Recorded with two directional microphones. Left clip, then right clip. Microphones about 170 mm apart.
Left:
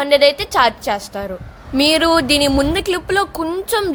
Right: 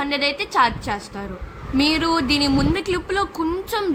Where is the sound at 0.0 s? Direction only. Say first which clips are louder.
Left 9 dB; 45° left (ahead or behind).